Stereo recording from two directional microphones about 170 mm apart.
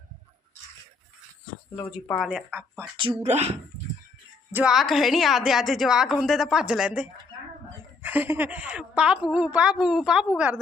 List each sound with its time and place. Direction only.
2.1 s a woman's voice: 5° right (ahead or behind)
3.2 s speech: 40° right (ahead or behind)
4.5 s a woman's voice: 5° right (ahead or behind)